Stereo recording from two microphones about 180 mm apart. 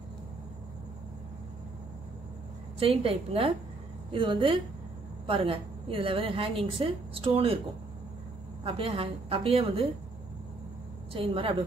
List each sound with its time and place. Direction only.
2.8 s a woman's voice: 30° right (ahead or behind)
8.6 s a woman's voice: 30° right (ahead or behind)
11.1 s a woman's voice: 30° right (ahead or behind)